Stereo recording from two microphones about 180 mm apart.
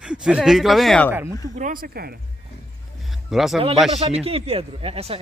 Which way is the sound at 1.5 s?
50° right (ahead or behind).